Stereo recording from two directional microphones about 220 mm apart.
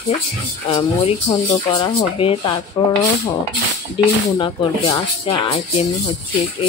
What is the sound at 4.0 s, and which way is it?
Speech, 20° left (ahead or behind).